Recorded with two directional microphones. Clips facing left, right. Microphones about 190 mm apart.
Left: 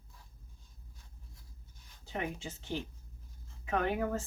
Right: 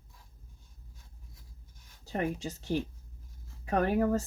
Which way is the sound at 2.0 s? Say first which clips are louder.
Right 6 dB; 40° right (ahead or behind).